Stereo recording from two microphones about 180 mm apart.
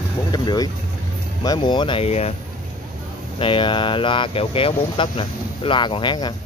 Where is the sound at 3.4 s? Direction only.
30° left (ahead or behind).